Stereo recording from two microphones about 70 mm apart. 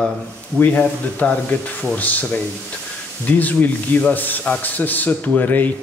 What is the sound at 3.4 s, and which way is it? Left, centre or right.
Speech, left.